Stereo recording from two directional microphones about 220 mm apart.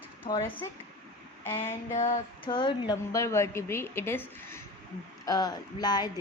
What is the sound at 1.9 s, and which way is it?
Speech, 25° left (ahead or behind).